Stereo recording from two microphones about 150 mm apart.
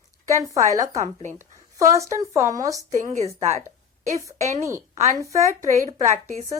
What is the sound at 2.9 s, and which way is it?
Speech, 55° right (ahead or behind).